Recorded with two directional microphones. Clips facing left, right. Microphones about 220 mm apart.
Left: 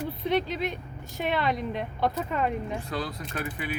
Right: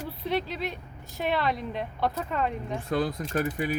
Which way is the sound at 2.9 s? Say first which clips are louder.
Right 6 dB; 50° right (ahead or behind).